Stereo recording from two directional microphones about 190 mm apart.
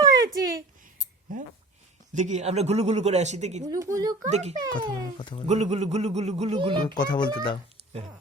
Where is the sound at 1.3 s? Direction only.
45° right (ahead or behind).